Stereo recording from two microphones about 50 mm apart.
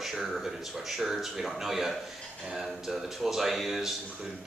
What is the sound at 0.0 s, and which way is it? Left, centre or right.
Speech, centre.